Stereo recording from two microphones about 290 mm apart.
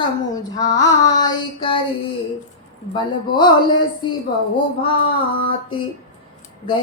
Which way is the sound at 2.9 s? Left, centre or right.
Centre.